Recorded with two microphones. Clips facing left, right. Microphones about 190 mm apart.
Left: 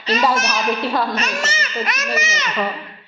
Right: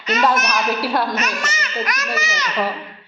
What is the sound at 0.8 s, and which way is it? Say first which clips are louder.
Speech: even; centre (ahead or behind).